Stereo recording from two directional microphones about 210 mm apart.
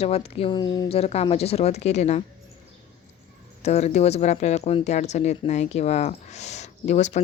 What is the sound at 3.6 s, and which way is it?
Speech, 30° left (ahead or behind).